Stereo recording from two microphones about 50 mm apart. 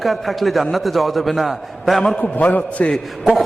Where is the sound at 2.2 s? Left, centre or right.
Left.